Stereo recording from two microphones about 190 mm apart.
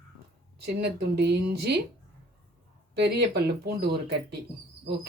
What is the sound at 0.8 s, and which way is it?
Speech, 60° right (ahead or behind).